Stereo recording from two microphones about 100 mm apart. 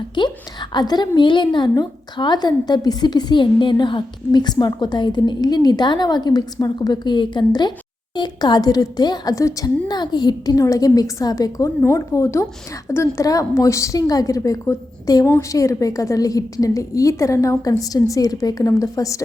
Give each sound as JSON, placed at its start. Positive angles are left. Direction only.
{"t": 0.2, "sound": "a woman's voice", "side_deg": 50}